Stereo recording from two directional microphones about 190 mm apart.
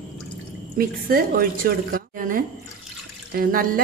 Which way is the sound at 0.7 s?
50° right (ahead or behind).